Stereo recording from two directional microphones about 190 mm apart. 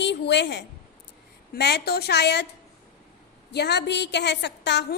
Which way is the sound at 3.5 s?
60° left (ahead or behind).